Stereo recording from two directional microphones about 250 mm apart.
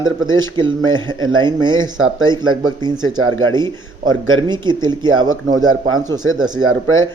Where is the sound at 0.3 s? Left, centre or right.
Centre.